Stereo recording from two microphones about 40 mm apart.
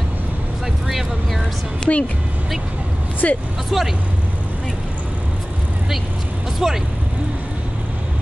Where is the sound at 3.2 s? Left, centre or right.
Left.